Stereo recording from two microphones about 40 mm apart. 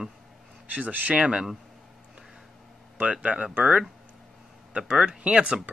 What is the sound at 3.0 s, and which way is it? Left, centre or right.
Speech, right.